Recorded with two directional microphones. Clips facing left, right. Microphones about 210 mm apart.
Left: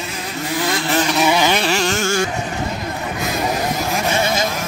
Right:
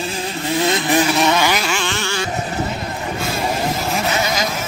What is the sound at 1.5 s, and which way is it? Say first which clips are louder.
Vehicle: left 3 dB; 35° left (ahead or behind).